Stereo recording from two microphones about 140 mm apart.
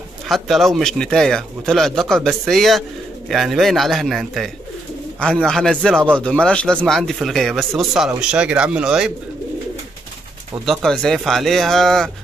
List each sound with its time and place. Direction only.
0.3 s a man's voice: centre (ahead or behind)
10.6 s a man's voice: centre (ahead or behind)